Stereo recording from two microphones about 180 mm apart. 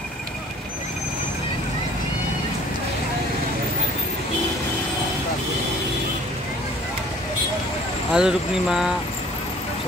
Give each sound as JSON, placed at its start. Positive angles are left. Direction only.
{"t": 8.1, "sound": "speech", "side_deg": -5}